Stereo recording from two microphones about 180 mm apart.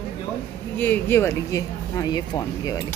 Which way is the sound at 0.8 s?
10° left (ahead or behind).